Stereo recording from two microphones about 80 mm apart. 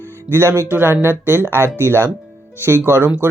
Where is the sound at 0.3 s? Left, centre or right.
Right.